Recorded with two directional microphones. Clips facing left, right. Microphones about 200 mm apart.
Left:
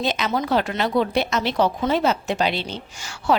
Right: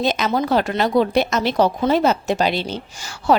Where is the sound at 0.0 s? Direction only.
45° right (ahead or behind).